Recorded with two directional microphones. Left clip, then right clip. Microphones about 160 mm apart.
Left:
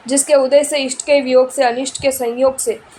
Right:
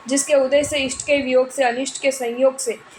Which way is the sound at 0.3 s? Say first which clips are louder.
Left 5 dB; 30° left (ahead or behind).